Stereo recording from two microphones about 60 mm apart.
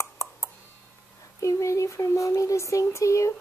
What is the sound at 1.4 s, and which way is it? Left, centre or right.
A child's voice, left.